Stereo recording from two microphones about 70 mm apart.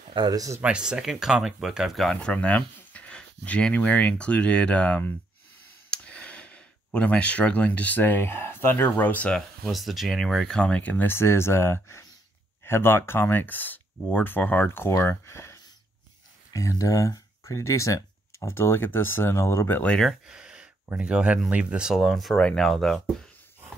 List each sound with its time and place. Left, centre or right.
0.2 s speech: right
0.6 s speech: centre
2.0 s speech: centre
5.9 s a sound: centre
8.0 s speech: left
9.7 s speech: centre; by 18.5 s left
18.5 s speech: left
20.2 s a sound: centre
21.0 s speech: centre
22.3 s speech: centre